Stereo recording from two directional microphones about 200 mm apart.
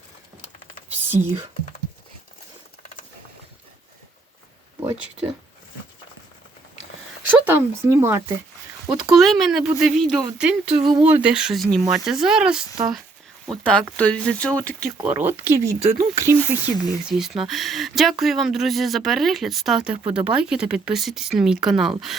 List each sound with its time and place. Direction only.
4.8 s speech: 15° right (ahead or behind)
7.3 s speech: 10° right (ahead or behind); by 14.8 s 5° left (ahead or behind)
15.0 s speech: 10° right (ahead or behind)